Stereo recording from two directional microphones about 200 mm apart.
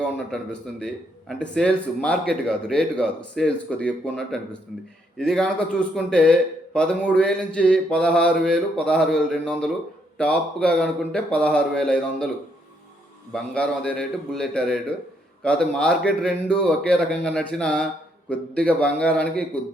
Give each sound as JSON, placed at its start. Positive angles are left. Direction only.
{"t": 0.8, "sound": "speech", "side_deg": 5}
{"t": 13.3, "sound": "a man's voice", "side_deg": 5}